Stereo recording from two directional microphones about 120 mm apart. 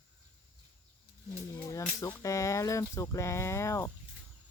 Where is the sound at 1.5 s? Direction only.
25° left (ahead or behind).